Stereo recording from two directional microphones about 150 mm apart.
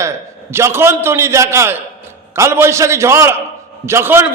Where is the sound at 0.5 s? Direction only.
15° right (ahead or behind).